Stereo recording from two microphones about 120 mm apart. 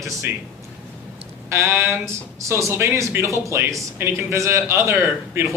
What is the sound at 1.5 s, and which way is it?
A man's voice, 20° right (ahead or behind).